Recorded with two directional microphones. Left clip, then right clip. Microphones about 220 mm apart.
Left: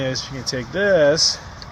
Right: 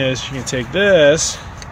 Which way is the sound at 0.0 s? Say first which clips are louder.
Right 5 dB; centre (ahead or behind).